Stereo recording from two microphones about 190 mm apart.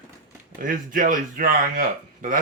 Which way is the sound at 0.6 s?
45° right (ahead or behind).